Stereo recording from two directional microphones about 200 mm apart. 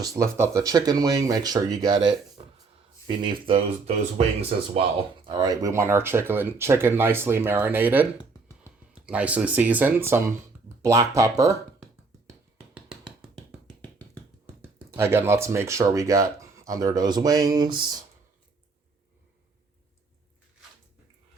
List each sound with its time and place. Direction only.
0.0 s speech: 15° right (ahead or behind)
2.4 s a sound: 30° right (ahead or behind)
3.1 s speech: 20° right (ahead or behind)
5.2 s speech: 20° right (ahead or behind)
9.0 s speech: 5° right (ahead or behind)
12.5 s a sound: 5° right (ahead or behind)
14.9 s speech: 10° right (ahead or behind)